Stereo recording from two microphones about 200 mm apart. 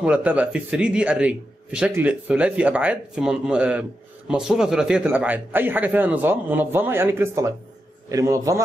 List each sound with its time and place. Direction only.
0.0 s a man's voice: 5° right (ahead or behind)